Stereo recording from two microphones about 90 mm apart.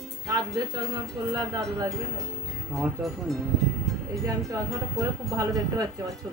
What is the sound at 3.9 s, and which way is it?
Music, centre (ahead or behind).